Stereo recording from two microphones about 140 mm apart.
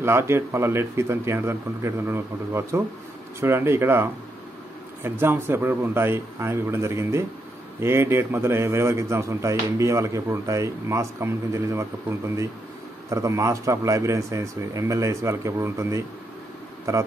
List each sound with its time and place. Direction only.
0.0 s a man's voice: 15° right (ahead or behind)